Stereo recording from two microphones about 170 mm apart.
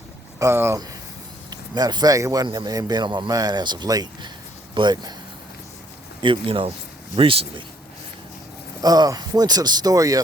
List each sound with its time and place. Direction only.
0.3 s a man's voice: 15° right (ahead or behind)
6.2 s a man's voice: 30° right (ahead or behind)
8.8 s a man's voice: 20° right (ahead or behind)